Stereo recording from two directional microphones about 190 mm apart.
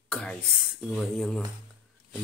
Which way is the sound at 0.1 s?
5° left (ahead or behind).